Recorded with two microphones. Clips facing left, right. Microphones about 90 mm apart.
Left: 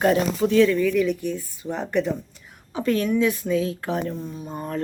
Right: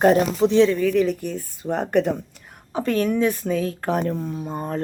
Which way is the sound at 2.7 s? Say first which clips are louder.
Right 1 dB; 35° right (ahead or behind).